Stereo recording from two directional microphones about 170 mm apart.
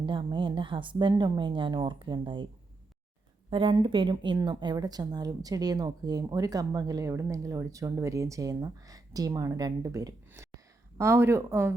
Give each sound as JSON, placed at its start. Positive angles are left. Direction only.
{"t": 0.0, "sound": "speech", "side_deg": -25}
{"t": 3.5, "sound": "speech", "side_deg": -30}